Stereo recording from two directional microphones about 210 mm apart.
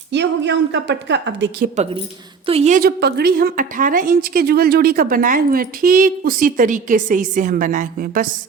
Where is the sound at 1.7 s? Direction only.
30° right (ahead or behind).